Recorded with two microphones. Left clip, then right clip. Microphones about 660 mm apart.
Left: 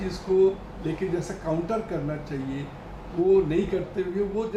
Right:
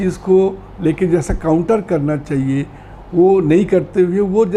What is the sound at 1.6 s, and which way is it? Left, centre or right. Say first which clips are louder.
Speech: right 13 dB; right.